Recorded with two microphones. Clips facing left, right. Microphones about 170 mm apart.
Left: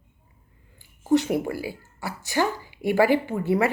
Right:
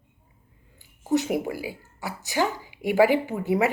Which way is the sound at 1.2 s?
15° right (ahead or behind).